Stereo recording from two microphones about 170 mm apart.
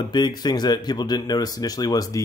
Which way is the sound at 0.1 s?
25° left (ahead or behind).